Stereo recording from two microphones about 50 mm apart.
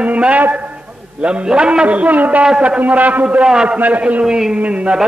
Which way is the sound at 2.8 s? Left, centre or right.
Right.